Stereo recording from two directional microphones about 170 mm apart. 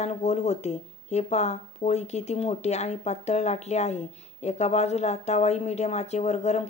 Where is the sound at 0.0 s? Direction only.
40° left (ahead or behind).